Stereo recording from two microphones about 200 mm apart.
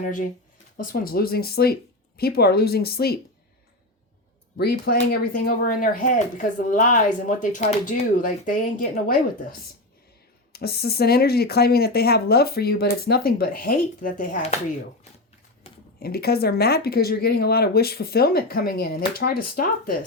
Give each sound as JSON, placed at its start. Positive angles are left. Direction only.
{"t": 0.0, "sound": "speech", "side_deg": 40}
{"t": 4.5, "sound": "speech", "side_deg": 50}
{"t": 10.5, "sound": "speech", "side_deg": 50}
{"t": 15.6, "sound": "a sound", "side_deg": 30}
{"t": 16.0, "sound": "speech", "side_deg": 50}